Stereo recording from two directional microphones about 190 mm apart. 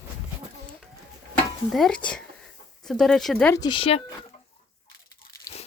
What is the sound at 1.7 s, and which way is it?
Speech, 5° left (ahead or behind).